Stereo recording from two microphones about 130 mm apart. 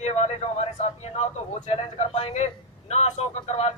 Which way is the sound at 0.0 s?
55° left (ahead or behind).